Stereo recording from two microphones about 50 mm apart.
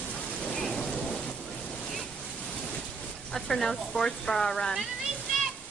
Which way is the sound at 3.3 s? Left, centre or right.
Centre.